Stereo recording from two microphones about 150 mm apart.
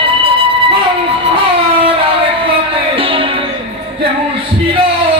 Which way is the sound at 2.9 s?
40° right (ahead or behind).